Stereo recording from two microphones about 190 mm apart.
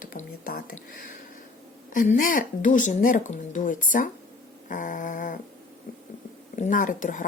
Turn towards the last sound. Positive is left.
turn(degrees=45)  # may be behind; listen again after turning